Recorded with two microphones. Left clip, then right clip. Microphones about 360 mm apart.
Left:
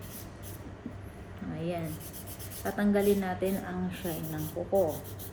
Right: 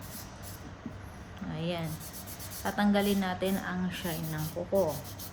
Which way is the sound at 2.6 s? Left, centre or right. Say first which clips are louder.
Left 1 dB; right.